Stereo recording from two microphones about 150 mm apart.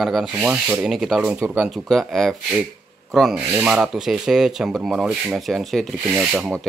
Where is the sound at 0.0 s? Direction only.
Centre (ahead or behind).